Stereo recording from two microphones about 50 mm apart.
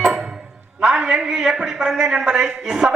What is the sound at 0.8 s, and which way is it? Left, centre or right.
A man's voice, centre.